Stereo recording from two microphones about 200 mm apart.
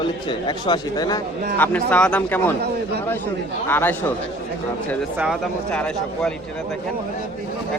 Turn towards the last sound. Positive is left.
turn(degrees=5)  # may be behind; listen again after turning